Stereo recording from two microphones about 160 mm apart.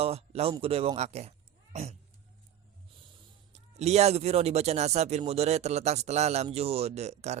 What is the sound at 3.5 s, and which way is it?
A man's voice, 45° right (ahead or behind).